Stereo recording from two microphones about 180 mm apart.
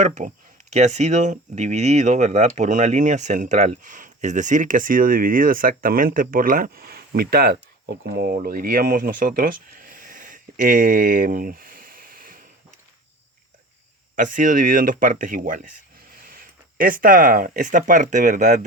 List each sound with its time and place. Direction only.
0.0 s speech: 40° right (ahead or behind)
14.2 s speech: 45° right (ahead or behind)